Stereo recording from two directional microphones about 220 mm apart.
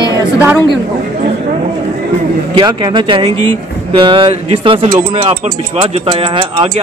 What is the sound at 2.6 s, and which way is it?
Speech, 20° right (ahead or behind).